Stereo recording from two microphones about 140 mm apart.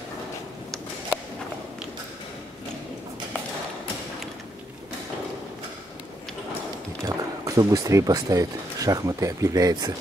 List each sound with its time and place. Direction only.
7.1 s speech: 25° right (ahead or behind)